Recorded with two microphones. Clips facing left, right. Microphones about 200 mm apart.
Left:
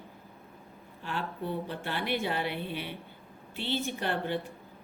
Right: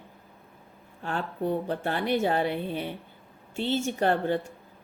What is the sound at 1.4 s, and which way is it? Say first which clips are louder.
Speech: right 7 dB; 50° right (ahead or behind).